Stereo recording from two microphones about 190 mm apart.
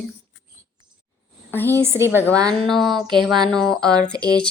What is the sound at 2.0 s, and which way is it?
Speech, 10° right (ahead or behind).